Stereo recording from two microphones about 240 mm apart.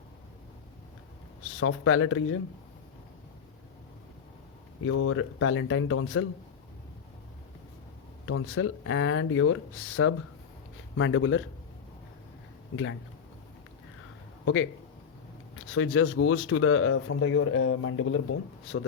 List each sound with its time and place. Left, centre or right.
1.5 s speech: left
4.8 s speech: left
8.3 s speech: left
12.7 s speech: left
14.4 s a man's voice: left
15.7 s speech: left